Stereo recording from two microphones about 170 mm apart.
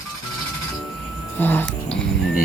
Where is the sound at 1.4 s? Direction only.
10° left (ahead or behind).